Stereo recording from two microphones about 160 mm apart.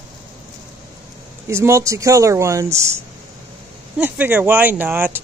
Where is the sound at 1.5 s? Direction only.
15° right (ahead or behind).